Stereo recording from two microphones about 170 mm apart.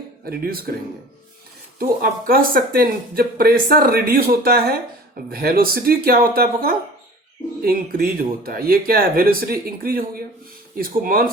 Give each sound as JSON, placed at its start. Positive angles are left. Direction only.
{"t": 0.3, "sound": "speech", "side_deg": -60}
{"t": 1.8, "sound": "speech", "side_deg": -60}